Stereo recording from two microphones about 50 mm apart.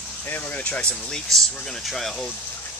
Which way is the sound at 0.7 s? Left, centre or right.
Left.